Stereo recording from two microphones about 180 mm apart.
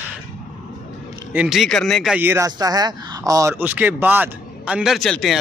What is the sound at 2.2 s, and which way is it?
Speech, 15° right (ahead or behind).